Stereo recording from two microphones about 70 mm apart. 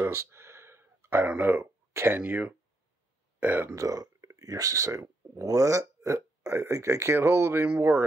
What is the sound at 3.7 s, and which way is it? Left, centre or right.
Speech, right.